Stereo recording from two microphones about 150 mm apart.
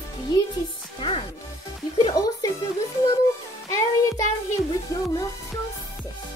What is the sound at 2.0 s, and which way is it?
Music, 25° left (ahead or behind).